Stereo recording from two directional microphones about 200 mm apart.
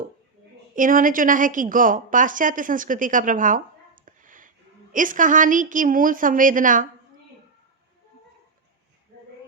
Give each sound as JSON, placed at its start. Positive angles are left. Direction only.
{"t": 0.8, "sound": "a woman's voice", "side_deg": -45}